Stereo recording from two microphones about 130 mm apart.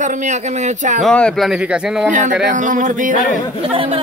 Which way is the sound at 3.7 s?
45° right (ahead or behind).